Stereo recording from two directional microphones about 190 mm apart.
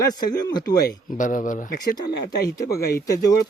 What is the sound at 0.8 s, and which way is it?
Speech, 45° left (ahead or behind).